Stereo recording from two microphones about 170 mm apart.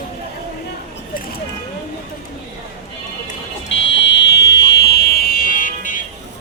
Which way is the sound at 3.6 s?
90° left.